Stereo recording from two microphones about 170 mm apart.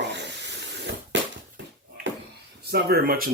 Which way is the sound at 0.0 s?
90° right.